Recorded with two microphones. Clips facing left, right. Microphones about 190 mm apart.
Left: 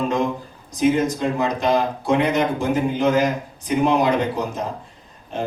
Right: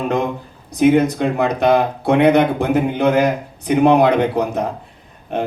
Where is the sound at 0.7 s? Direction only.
60° right (ahead or behind).